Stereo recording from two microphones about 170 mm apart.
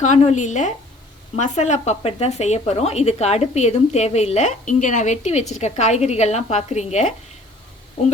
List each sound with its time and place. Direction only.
0.0 s a woman's voice: 45° left (ahead or behind)